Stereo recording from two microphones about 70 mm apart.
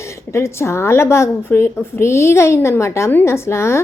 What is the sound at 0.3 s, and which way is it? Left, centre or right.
A woman's voice, left.